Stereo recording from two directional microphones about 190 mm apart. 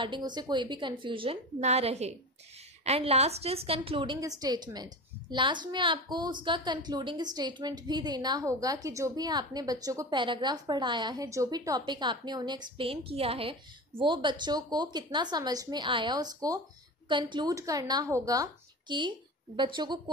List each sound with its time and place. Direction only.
0.0 s a woman's voice: 25° right (ahead or behind)